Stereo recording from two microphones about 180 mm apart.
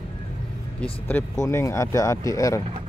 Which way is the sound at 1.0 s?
15° left (ahead or behind).